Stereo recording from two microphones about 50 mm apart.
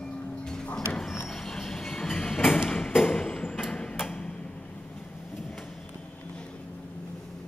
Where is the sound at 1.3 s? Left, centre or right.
Centre.